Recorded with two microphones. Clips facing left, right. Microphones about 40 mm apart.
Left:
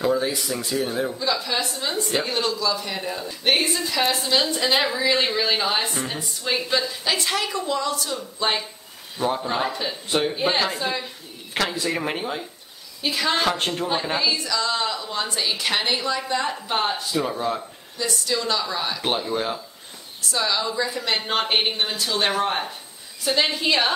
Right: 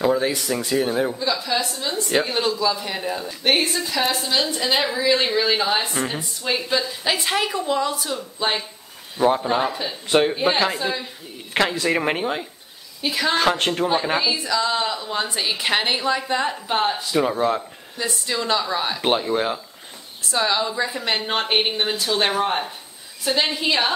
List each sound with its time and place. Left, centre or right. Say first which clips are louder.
0.7 s a woman's voice: right 4 dB; centre
1.1 s a woman's voice: right 1 dB; centre
2.2 s a woman's voice: right 2 dB; centre
7.1 s a woman's voice: right 3 dB; centre
11.8 s speech: right 4 dB; right
13.0 s a woman's voice: right 2 dB; centre
16.4 s a woman's voice: right 2 dB; centre
17.1 s speech: right 4 dB; right
21.2 s a woman's voice: right 1 dB; centre